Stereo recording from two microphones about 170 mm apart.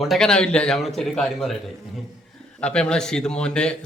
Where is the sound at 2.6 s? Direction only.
5° left (ahead or behind).